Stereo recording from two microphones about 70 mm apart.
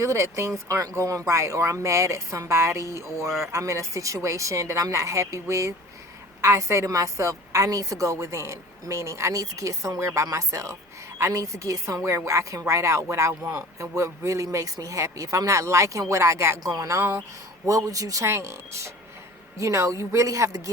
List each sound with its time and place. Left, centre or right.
0.0 s a woman's voice: right
16.6 s speech: right
18.3 s a woman's voice: right